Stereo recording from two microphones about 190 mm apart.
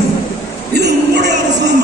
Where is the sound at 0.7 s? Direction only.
60° right (ahead or behind).